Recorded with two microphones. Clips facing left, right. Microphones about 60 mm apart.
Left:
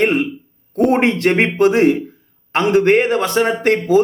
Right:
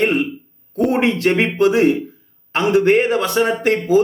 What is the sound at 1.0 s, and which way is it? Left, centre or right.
Speech, left.